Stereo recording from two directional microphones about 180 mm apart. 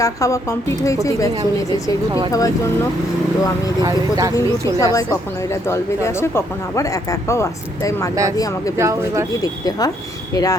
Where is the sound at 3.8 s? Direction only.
20° right (ahead or behind).